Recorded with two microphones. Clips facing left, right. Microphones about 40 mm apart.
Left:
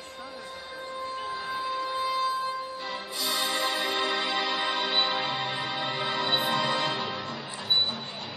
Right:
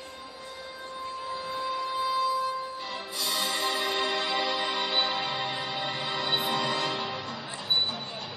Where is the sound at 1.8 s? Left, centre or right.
Left.